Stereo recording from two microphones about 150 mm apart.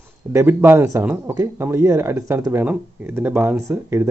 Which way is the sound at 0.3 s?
15° right (ahead or behind).